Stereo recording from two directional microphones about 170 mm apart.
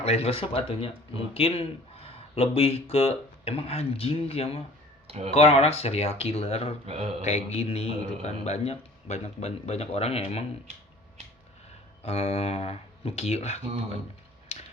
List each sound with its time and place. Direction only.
0.0 s speech: 35° left (ahead or behind)
5.0 s speech: 40° right (ahead or behind)
5.3 s speech: 35° left (ahead or behind)
6.8 s speech: 35° right (ahead or behind)
7.3 s speech: 35° left (ahead or behind)
12.0 s speech: 35° left (ahead or behind)